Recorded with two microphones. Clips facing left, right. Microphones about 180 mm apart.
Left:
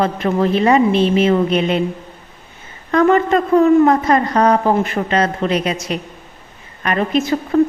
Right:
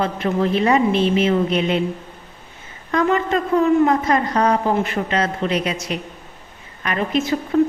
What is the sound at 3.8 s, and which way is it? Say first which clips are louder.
A woman's voice: left 4 dB; 45° left (ahead or behind).